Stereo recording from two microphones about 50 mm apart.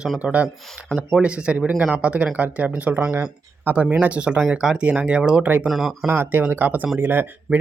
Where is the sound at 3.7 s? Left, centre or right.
Right.